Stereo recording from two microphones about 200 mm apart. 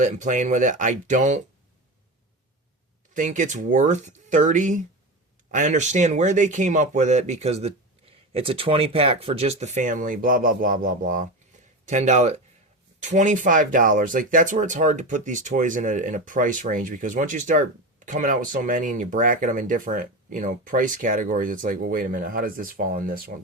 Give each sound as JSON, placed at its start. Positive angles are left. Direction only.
{"t": 0.0, "sound": "speech", "side_deg": -40}
{"t": 3.2, "sound": "speech", "side_deg": -40}